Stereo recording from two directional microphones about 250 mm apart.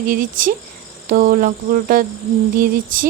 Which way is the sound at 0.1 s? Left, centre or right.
Right.